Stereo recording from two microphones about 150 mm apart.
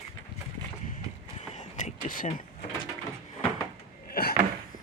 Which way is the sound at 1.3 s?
50° left (ahead or behind).